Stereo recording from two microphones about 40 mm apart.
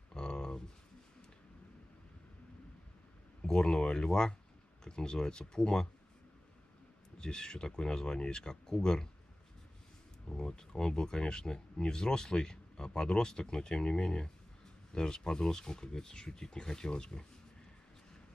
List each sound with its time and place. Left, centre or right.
0.1 s a sound: centre
3.4 s speech: centre
7.2 s speech: centre
10.2 s speech: centre